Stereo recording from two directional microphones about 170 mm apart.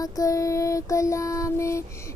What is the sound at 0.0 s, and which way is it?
Music, 20° left (ahead or behind).